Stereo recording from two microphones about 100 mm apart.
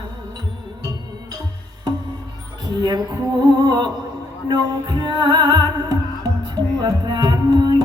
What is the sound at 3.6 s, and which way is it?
Music, 45° right (ahead or behind).